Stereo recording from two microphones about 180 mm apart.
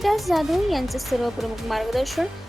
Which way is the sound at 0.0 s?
Centre (ahead or behind).